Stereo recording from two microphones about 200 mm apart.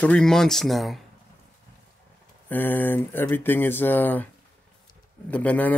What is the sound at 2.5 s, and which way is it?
Speech, 10° left (ahead or behind).